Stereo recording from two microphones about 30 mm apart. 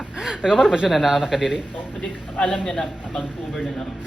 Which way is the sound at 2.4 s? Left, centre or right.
Centre.